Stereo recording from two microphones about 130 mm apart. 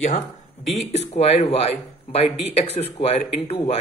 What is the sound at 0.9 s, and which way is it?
Speech, 55° left (ahead or behind).